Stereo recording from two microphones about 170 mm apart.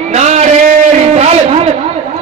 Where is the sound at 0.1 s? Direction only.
45° right (ahead or behind).